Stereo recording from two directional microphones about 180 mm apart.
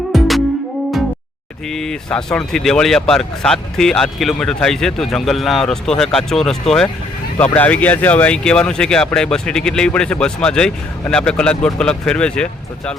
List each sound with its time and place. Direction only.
0.1 s music: centre (ahead or behind)
1.7 s speech: 5° left (ahead or behind)